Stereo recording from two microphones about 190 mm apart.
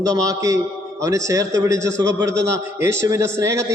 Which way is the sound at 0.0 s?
20° right (ahead or behind).